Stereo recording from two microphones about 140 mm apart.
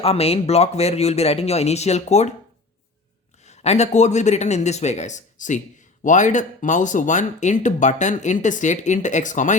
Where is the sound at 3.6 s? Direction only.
55° left (ahead or behind).